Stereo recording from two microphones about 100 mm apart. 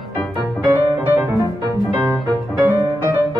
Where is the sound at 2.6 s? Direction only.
20° right (ahead or behind).